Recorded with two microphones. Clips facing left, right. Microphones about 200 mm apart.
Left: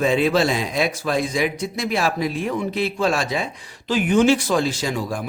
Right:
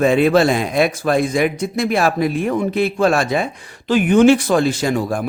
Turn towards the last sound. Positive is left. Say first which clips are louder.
# right 6 dB
turn(degrees=-55)  # may be behind; listen again after turning